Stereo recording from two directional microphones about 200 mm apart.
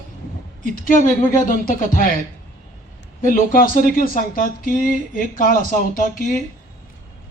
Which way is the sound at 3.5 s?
45° left (ahead or behind).